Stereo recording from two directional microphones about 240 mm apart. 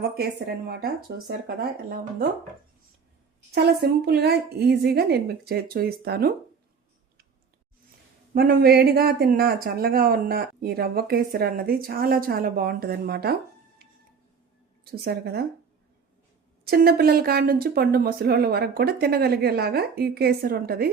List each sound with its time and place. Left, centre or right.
0.0 s speech: right
3.5 s speech: right
8.3 s speech: right
14.8 s speech: right
16.6 s speech: right